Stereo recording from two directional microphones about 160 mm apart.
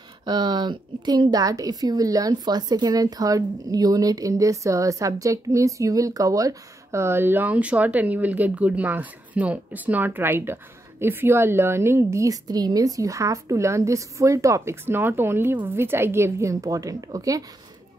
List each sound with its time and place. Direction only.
0.2 s speech: 25° right (ahead or behind)